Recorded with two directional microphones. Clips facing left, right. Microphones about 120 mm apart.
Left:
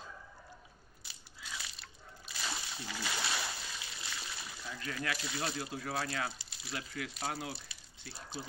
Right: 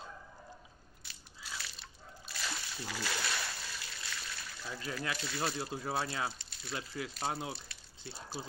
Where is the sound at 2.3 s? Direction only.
Centre (ahead or behind).